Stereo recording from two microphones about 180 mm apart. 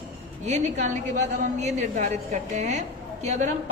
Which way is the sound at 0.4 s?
40° right (ahead or behind).